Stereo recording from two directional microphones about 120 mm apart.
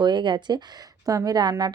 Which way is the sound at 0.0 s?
40° right (ahead or behind).